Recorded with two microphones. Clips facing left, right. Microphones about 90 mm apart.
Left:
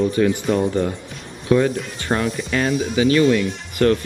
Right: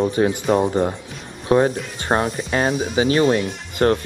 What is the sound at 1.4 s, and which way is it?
Speech, 35° right (ahead or behind).